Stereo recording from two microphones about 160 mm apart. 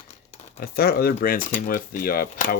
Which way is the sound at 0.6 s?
70° left (ahead or behind).